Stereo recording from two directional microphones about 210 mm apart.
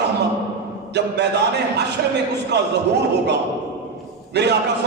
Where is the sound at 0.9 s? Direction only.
55° right (ahead or behind).